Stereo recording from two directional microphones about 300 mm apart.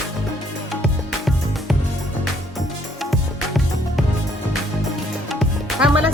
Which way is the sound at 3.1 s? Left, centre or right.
Centre.